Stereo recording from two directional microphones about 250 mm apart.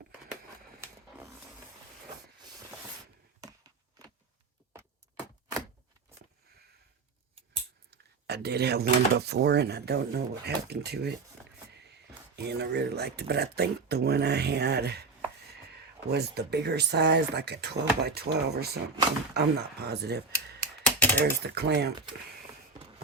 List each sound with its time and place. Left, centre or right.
7.9 s speech: right
12.4 s speech: right
20.8 s typing: centre
21.4 s speech: right